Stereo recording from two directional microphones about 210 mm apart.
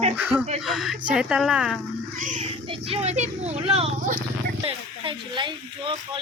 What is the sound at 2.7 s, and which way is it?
Speech, 30° right (ahead or behind).